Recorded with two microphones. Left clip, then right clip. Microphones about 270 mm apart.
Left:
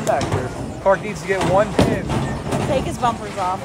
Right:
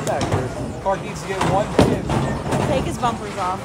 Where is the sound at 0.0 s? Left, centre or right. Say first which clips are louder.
Left 2 dB; centre.